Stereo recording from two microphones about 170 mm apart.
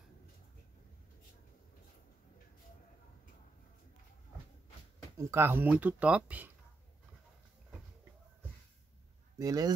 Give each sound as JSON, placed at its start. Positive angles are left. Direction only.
{"t": 5.1, "sound": "speech", "side_deg": -15}
{"t": 9.4, "sound": "speech", "side_deg": -20}